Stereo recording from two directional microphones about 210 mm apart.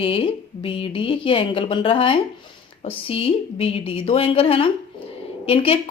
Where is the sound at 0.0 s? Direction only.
25° left (ahead or behind).